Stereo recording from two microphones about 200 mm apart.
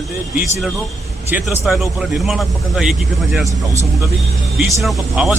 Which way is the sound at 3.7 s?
15° right (ahead or behind).